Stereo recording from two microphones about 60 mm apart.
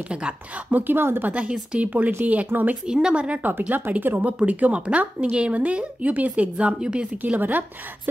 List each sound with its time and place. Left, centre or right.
0.1 s speech: centre
0.7 s speech: right
1.3 s speech: centre
2.9 s speech: centre
3.4 s speech: right; by 7.3 s centre
7.3 s speech: right